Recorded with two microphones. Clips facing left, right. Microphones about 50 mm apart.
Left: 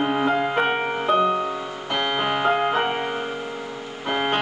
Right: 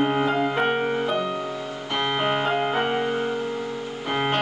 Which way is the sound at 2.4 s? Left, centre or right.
Left.